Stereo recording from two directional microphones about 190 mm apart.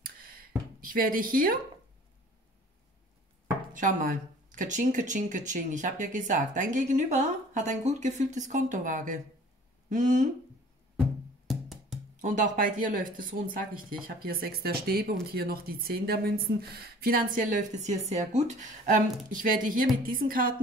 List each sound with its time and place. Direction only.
0.0 s a sound: 50° right (ahead or behind)
0.7 s speech: 50° right (ahead or behind)
3.7 s speech: 45° right (ahead or behind)
11.4 s music: centre (ahead or behind)
12.2 s speech: 45° right (ahead or behind)